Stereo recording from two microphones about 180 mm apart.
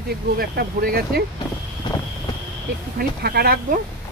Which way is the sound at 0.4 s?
55° right (ahead or behind).